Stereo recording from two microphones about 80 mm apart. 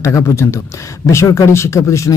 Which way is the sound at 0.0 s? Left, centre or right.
Left.